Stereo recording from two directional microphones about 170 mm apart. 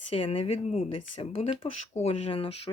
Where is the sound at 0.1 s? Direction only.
35° left (ahead or behind).